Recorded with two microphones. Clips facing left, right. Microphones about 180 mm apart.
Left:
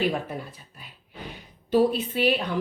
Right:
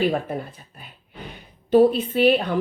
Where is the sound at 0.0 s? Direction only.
50° right (ahead or behind).